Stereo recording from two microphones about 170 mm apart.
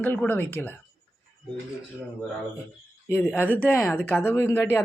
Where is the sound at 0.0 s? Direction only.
10° left (ahead or behind).